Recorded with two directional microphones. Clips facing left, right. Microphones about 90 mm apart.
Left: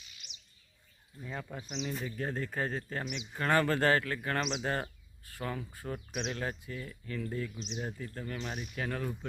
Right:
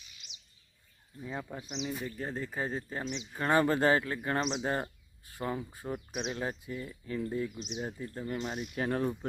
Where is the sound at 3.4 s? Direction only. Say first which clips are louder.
Right 2 dB; 20° right (ahead or behind).